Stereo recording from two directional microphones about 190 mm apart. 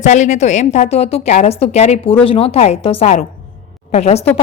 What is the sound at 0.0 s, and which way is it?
A woman's voice, 40° left (ahead or behind).